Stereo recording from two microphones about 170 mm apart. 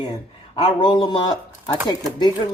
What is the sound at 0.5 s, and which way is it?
Speech, 30° left (ahead or behind).